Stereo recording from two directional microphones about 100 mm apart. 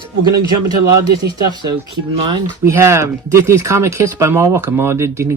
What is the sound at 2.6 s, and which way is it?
Speech, 25° right (ahead or behind).